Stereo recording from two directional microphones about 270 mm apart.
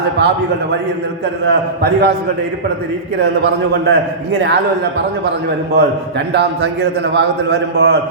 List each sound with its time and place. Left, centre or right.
1.5 s a man's voice: right
3.8 s a man's voice: right
5.7 s a man's voice: right